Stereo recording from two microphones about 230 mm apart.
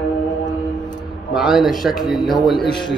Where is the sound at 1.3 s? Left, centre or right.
Centre.